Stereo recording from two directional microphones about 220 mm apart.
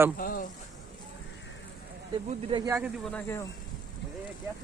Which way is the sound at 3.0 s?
10° left (ahead or behind).